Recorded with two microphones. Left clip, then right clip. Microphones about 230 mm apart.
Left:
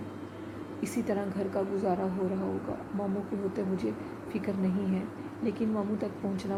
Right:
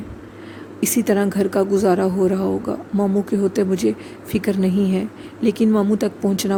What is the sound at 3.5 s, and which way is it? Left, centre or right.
Speech, right.